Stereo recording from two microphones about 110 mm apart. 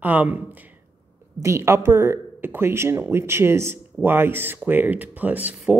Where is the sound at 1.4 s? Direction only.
25° right (ahead or behind).